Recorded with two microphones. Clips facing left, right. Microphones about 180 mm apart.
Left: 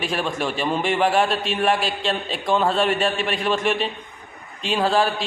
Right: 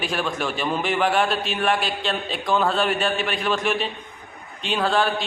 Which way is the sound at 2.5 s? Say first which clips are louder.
Left 1 dB; 30° left (ahead or behind).